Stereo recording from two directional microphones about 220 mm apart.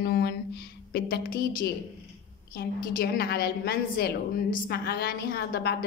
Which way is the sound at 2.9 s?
45° left (ahead or behind).